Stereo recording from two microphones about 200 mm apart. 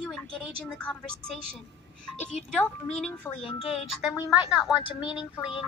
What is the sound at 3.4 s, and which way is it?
Speech, 25° left (ahead or behind).